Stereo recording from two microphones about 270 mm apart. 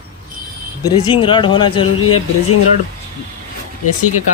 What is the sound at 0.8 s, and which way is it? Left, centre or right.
Speech, centre.